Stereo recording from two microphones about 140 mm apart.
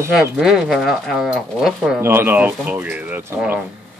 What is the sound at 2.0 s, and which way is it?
Speech, 15° right (ahead or behind).